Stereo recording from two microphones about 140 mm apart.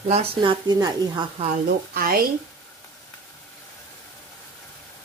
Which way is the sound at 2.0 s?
90° right.